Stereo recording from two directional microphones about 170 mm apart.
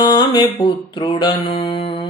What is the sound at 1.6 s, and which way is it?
Music, 30° left (ahead or behind).